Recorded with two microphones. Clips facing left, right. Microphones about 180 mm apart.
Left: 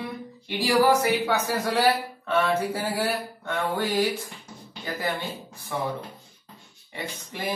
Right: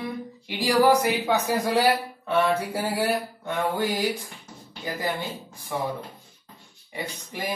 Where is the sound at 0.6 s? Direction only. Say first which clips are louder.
Right 1 dB; 15° right (ahead or behind).